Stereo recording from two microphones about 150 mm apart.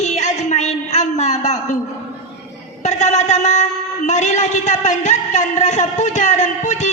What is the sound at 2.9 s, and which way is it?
A man's voice, 50° left (ahead or behind).